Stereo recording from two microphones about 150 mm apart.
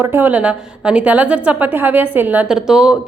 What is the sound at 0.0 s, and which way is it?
A woman's voice, 15° right (ahead or behind).